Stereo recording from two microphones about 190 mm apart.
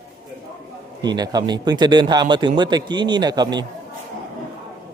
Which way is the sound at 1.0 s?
20° right (ahead or behind).